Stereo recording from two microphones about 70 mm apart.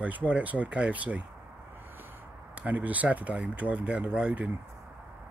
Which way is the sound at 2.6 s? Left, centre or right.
Right.